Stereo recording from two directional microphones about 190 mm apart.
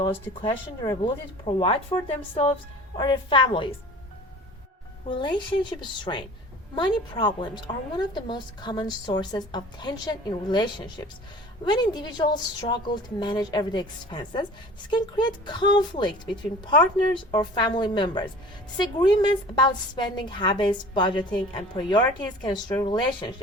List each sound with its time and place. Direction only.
0.0 s a woman's voice: 25° left (ahead or behind)
5.0 s a woman's voice: 25° left (ahead or behind)
17.3 s a woman's voice: 25° left (ahead or behind)